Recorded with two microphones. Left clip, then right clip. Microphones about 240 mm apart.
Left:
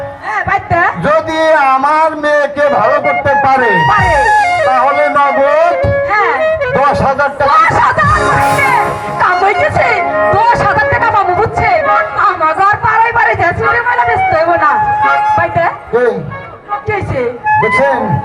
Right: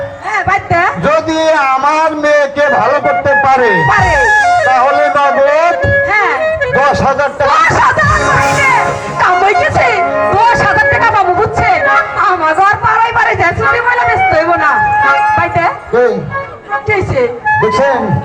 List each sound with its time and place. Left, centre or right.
0.5 s a sound: right
3.2 s music: right
4.2 s music: left
5.1 s a sound: right
6.1 s music: right
8.0 s music: left
9.2 s music: right
12.2 s a sound: right
15.1 s music: right
17.6 s speech: right